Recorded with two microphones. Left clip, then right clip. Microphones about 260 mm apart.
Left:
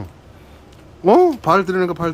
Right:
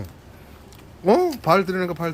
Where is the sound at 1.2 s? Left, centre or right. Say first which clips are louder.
Left 5 dB; left.